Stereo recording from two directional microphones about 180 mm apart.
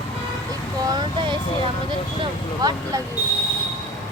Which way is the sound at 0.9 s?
25° right (ahead or behind).